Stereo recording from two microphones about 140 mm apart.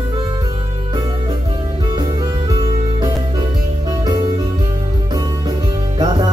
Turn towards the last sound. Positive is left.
turn(degrees=-30)  # may be behind; listen again after turning